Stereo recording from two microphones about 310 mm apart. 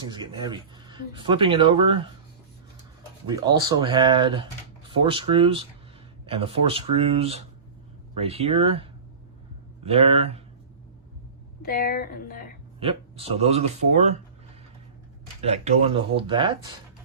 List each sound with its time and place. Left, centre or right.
0.1 s speech: centre
3.2 s speech: centre
11.6 s speech: left
12.8 s speech: centre
15.4 s speech: right